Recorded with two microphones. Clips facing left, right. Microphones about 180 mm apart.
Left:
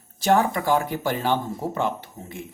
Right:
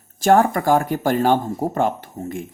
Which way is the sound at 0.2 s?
50° right (ahead or behind).